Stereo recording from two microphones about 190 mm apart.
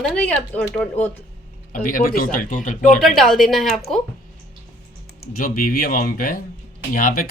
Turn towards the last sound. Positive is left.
turn(degrees=50)  # may be behind; listen again after turning